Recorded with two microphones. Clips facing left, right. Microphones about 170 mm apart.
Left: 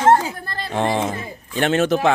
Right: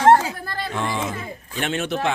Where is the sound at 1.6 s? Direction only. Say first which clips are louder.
Left 7 dB; 40° left (ahead or behind).